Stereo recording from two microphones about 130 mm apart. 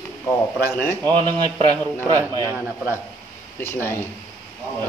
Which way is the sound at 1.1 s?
40° right (ahead or behind).